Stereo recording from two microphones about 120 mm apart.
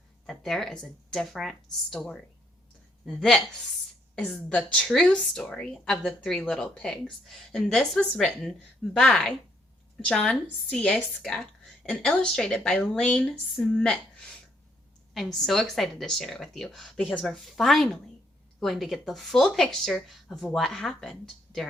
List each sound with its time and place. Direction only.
0.3 s a woman's voice: 5° left (ahead or behind)
15.1 s a woman's voice: centre (ahead or behind)